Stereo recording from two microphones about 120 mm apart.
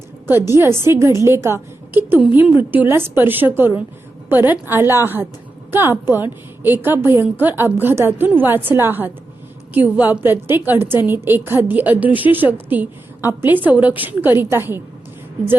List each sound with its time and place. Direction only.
0.3 s a woman's voice: 20° right (ahead or behind)